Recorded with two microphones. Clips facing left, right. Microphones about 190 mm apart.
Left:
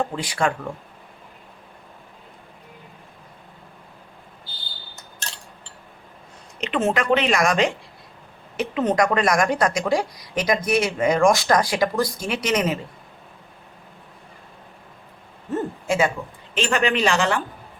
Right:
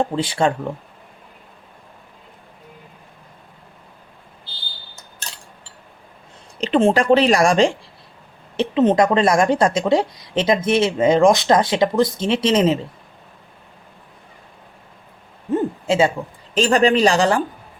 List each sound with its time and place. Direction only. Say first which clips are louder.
0.0 s a woman's voice: right 4 dB; 25° right (ahead or behind)
6.6 s a woman's voice: right 6 dB; 35° right (ahead or behind)
15.5 s hoot: right 5 dB; 25° right (ahead or behind)
16.6 s a woman's voice: right 6 dB; 35° right (ahead or behind)